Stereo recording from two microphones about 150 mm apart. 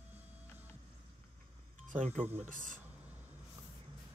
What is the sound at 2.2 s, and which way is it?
Speech, 15° right (ahead or behind).